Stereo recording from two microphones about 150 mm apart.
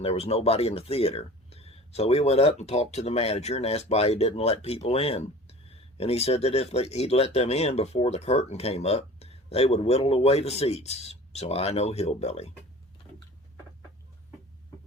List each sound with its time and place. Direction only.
0.0 s speech: 45° left (ahead or behind)